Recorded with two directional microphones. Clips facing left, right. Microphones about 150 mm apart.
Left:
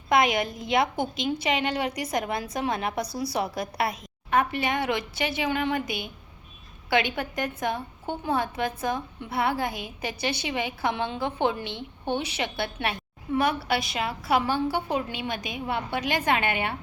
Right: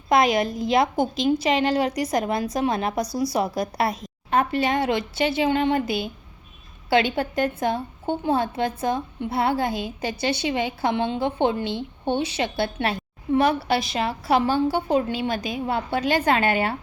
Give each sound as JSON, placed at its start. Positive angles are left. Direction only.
{"t": 0.1, "sound": "a woman's voice", "side_deg": -25}